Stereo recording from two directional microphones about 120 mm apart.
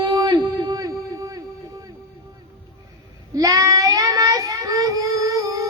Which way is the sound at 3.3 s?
30° right (ahead or behind).